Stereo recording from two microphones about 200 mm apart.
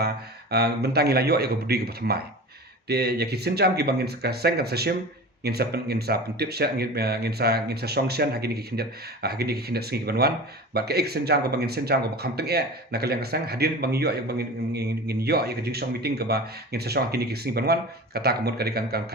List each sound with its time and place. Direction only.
0.5 s speech: 55° right (ahead or behind)